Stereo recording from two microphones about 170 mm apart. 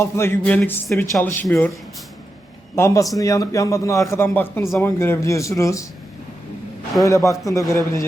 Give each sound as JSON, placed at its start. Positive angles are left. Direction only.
{"t": 0.0, "sound": "a man's voice", "side_deg": 15}
{"t": 2.7, "sound": "a man's voice", "side_deg": 15}
{"t": 7.0, "sound": "a man's voice", "side_deg": 20}